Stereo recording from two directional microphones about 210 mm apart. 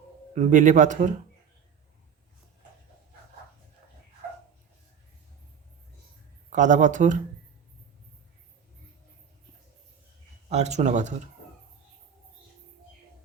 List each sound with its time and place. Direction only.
0.3 s speech: 35° right (ahead or behind)
6.5 s speech: 35° right (ahead or behind)
10.5 s speech: 30° right (ahead or behind)